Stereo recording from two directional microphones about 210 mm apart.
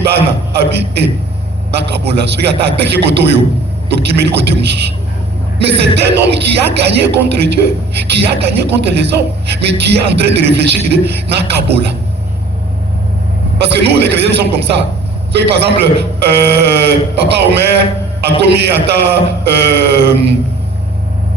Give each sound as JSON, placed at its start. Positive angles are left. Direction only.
{"t": 0.6, "sound": "a man's voice", "side_deg": -50}
{"t": 13.7, "sound": "a man's voice", "side_deg": -50}